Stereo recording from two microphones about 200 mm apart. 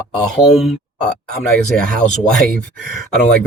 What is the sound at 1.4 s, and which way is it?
Speech, 5° left (ahead or behind).